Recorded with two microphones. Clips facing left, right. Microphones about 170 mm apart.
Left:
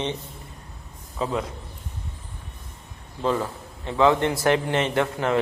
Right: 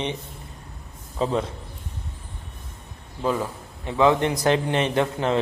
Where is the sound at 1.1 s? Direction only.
30° right (ahead or behind).